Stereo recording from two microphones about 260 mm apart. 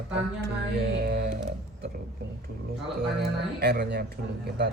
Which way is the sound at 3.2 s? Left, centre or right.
Right.